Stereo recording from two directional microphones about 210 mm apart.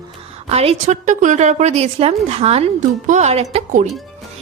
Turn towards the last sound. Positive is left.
turn(degrees=-30)  # may be behind; listen again after turning